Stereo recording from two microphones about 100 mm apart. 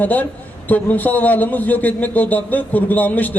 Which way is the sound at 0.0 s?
15° left (ahead or behind).